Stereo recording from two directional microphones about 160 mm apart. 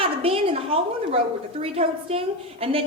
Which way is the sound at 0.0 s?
35° right (ahead or behind).